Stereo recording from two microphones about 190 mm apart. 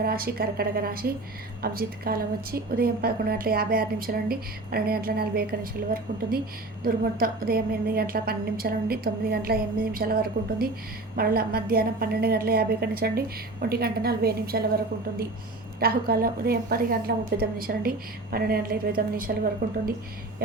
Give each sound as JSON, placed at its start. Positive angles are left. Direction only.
{"t": 0.0, "sound": "a woman's voice", "side_deg": -50}
{"t": 15.8, "sound": "a woman's voice", "side_deg": -50}